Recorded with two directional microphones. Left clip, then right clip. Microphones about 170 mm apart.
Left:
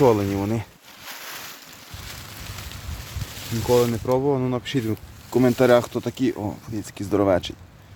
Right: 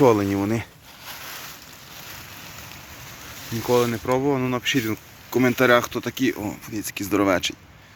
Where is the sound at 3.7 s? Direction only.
5° left (ahead or behind); by 6.3 s 20° left (ahead or behind).